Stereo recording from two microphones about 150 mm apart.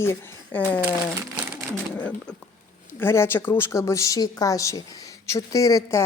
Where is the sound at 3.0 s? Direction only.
15° left (ahead or behind).